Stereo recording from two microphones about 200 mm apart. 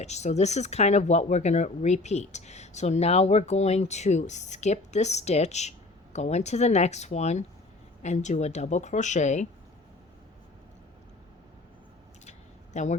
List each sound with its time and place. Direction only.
0.0 s speech: 35° left (ahead or behind)
12.7 s a man's voice: 35° left (ahead or behind)